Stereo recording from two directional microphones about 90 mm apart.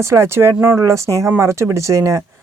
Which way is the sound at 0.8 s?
35° right (ahead or behind).